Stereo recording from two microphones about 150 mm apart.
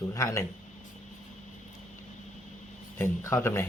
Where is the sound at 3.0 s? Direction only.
20° left (ahead or behind).